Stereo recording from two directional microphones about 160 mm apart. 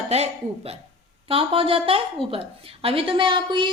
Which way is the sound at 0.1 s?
40° right (ahead or behind).